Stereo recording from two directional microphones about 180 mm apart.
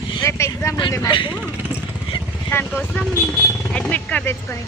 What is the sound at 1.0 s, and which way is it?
Speech, 25° left (ahead or behind).